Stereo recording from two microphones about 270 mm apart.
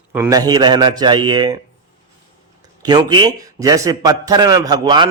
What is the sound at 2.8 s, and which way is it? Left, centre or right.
Speech, centre.